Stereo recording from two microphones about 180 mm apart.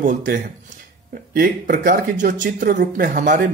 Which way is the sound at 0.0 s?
45° right (ahead or behind).